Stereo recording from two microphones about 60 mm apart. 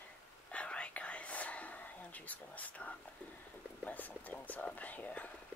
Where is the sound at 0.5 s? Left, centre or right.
Centre.